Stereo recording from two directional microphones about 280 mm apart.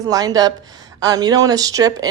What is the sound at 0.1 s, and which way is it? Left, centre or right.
Speech, centre.